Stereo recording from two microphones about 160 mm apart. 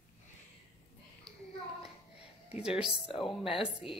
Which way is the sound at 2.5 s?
5° right (ahead or behind).